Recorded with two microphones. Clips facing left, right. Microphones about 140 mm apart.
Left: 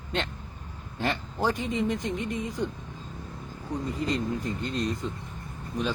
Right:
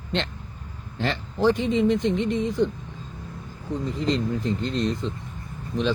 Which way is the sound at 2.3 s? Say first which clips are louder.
Right 7 dB; 5° left (ahead or behind).